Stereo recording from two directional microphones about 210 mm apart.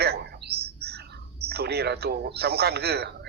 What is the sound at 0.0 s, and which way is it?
Bird, 50° right (ahead or behind).